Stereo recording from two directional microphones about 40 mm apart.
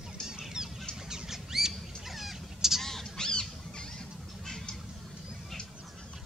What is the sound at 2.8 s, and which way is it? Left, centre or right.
Crow, centre.